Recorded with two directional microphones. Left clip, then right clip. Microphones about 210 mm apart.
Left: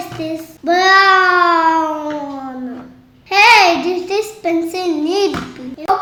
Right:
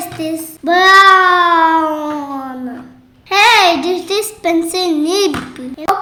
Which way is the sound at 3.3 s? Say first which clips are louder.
Even; 35° right (ahead or behind).